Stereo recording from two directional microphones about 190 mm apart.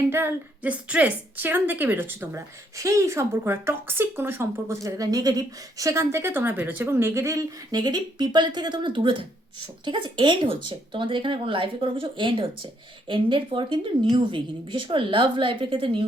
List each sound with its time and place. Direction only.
0.1 s a woman's voice: 10° right (ahead or behind); by 16.0 s 30° right (ahead or behind)